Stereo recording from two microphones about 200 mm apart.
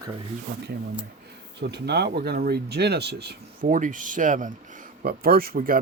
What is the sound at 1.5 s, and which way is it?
Speech, 55° right (ahead or behind).